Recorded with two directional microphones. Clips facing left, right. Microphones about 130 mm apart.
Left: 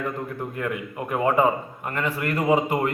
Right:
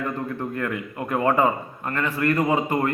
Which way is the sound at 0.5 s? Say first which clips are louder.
Right 1 dB; 15° left (ahead or behind).